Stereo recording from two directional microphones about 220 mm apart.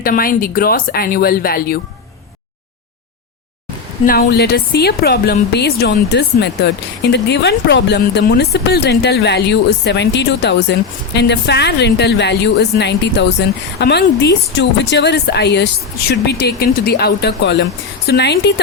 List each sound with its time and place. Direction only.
0.0 s speech: 40° left (ahead or behind)
4.0 s speech: 45° left (ahead or behind)